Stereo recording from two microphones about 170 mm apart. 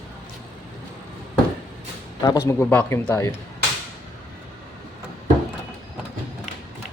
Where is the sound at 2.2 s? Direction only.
20° left (ahead or behind).